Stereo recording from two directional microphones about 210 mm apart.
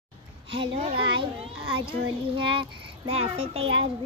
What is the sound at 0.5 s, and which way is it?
A child's voice, 25° right (ahead or behind).